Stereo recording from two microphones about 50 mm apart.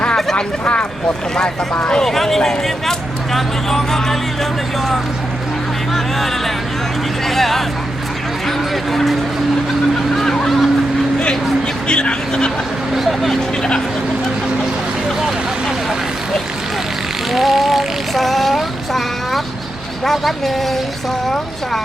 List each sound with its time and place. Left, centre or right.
0.6 s speech: left
1.9 s speech: centre
5.9 s vehicle: centre
10.2 s a sound: centre
11.9 s speech: centre
13.6 s speech: centre
17.3 s vehicle: centre